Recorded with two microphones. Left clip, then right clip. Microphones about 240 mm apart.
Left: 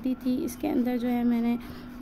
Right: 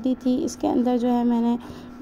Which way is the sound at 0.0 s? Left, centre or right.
Centre.